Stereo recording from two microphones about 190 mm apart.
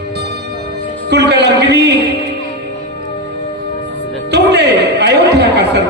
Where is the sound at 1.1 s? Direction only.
60° right (ahead or behind).